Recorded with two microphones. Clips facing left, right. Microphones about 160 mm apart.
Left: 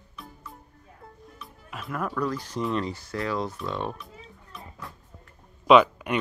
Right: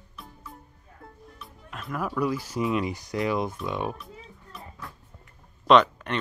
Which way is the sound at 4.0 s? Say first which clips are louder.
Right 1 dB; centre (ahead or behind).